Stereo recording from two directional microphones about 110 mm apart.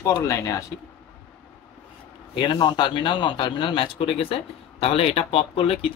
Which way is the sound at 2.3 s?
40° left (ahead or behind).